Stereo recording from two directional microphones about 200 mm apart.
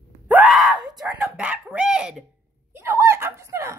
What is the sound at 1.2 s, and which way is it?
Cough, 5° right (ahead or behind).